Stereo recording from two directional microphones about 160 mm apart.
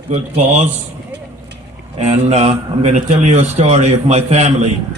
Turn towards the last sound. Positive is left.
turn(degrees=-40)  # may be behind; listen again after turning